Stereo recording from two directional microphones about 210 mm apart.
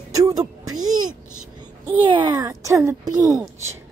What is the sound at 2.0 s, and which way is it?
A woman's voice, 20° right (ahead or behind).